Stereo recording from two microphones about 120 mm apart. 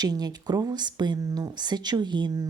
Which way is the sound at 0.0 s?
35° right (ahead or behind).